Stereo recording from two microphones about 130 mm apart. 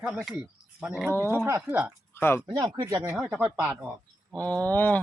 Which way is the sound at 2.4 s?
30° right (ahead or behind).